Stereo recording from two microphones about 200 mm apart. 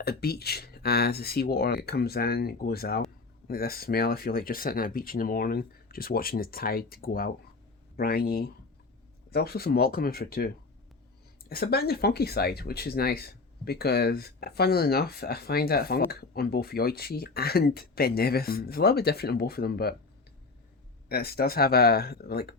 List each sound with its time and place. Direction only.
0.0 s speech: 50° left (ahead or behind)
21.1 s speech: 50° left (ahead or behind)